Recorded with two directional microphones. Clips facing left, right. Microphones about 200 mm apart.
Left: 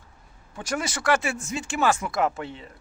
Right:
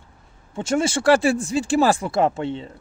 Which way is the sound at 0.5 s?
25° right (ahead or behind).